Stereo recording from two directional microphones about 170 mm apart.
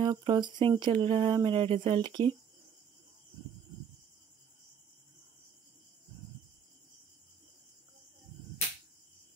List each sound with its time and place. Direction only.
0.0 s speech: 25° right (ahead or behind)